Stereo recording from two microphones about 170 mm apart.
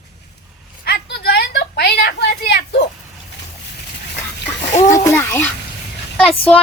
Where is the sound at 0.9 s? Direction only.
75° left (ahead or behind).